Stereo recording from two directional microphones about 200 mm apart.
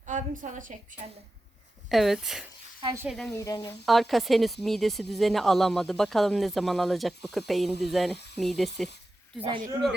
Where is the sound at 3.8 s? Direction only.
Centre (ahead or behind).